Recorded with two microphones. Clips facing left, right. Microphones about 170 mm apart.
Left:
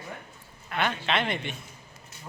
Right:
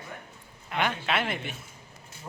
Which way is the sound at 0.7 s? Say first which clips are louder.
Even; 10° right (ahead or behind).